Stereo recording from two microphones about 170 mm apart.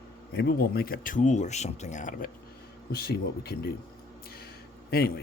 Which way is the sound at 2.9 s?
65° left (ahead or behind).